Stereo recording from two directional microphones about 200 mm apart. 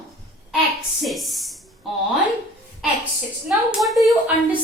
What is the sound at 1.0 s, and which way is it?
Speech, centre (ahead or behind).